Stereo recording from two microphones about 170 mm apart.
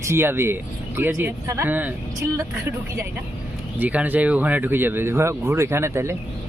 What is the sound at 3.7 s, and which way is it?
Speech, 10° right (ahead or behind).